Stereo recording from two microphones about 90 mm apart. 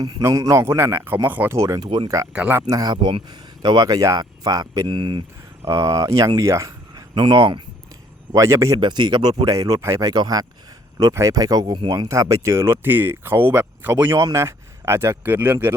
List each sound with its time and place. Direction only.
0.2 s speech: 35° right (ahead or behind)
1.5 s speech: 35° right (ahead or behind); by 5.2 s 60° right (ahead or behind)
5.6 s speech: 40° right (ahead or behind)
7.1 s speech: 65° right (ahead or behind)
8.4 s speech: 35° right (ahead or behind)
8.8 s speech: 55° right (ahead or behind)
11.6 s speech: 70° right (ahead or behind)
12.0 s speech: 35° right (ahead or behind)